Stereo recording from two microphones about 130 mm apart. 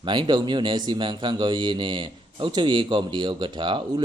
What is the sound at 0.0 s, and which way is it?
A man's voice, 35° right (ahead or behind).